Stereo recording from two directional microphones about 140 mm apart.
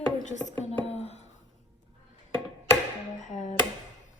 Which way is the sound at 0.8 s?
50° left (ahead or behind).